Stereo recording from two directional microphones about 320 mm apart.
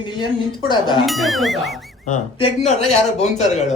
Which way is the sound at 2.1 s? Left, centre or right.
Left.